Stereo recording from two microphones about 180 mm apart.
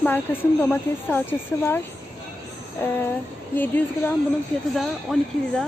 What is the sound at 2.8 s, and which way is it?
A woman's voice, 10° left (ahead or behind).